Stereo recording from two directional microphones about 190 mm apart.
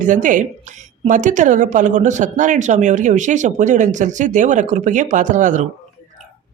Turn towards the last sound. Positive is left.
turn(degrees=-40)  # may be behind; listen again after turning